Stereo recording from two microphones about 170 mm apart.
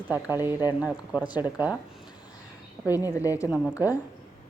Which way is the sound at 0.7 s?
10° right (ahead or behind).